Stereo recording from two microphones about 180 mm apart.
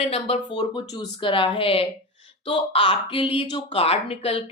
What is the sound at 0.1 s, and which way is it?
Speech, 30° left (ahead or behind).